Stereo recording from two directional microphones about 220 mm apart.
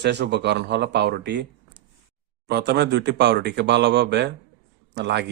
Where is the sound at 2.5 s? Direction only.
50° right (ahead or behind).